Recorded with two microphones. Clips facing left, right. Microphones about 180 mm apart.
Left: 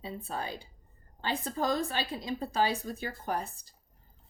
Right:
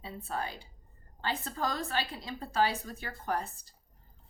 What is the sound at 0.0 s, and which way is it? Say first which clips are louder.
A woman's voice: even; 20° left (ahead or behind).